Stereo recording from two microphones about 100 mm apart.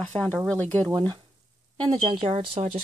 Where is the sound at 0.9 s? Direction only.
45° right (ahead or behind); by 2.8 s 70° right (ahead or behind).